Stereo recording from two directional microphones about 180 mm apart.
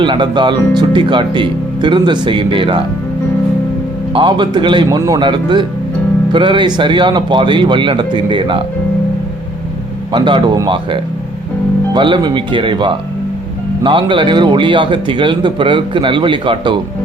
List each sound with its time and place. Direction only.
0.0 s a man's voice: 25° right (ahead or behind)
4.1 s a man's voice: 25° right (ahead or behind)
10.1 s a man's voice: 25° right (ahead or behind)